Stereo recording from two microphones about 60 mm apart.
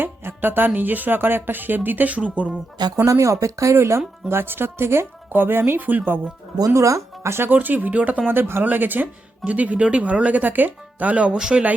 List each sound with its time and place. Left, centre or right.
0.0 s speech: right
3.1 s speech: right
6.7 s speech: right
7.5 s speech: right
8.3 s speech: right
11.3 s speech: centre